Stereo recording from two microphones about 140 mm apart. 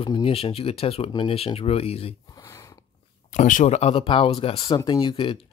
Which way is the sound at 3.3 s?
65° left (ahead or behind).